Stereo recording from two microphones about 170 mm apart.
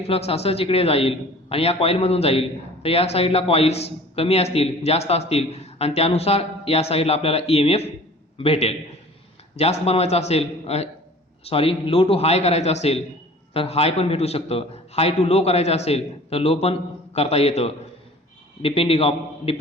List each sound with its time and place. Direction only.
0.0 s a man's voice: 35° left (ahead or behind)